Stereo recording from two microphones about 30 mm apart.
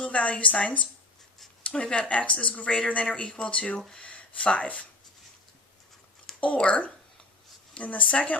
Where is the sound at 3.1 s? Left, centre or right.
Left.